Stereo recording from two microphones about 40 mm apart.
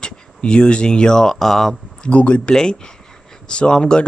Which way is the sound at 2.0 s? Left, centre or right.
Left.